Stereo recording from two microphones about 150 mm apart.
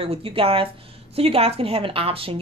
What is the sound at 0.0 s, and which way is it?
A woman's voice, 40° right (ahead or behind).